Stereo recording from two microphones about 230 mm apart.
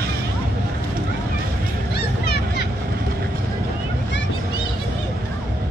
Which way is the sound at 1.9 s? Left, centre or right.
Left.